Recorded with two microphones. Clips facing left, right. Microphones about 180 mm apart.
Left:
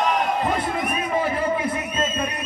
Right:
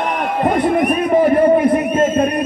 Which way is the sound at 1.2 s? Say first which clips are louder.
Right 12 dB; 60° right (ahead or behind).